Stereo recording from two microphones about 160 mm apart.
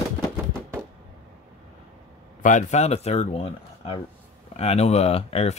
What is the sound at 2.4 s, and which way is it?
Speech, 50° left (ahead or behind).